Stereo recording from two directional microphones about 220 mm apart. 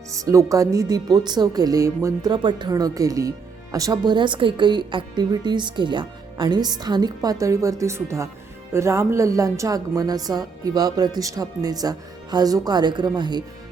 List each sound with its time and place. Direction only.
0.3 s speech: 15° right (ahead or behind)